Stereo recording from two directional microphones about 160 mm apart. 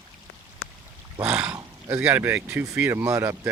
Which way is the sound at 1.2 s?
5° right (ahead or behind).